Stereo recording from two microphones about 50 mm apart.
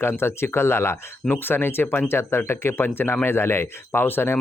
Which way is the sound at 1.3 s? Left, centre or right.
Left.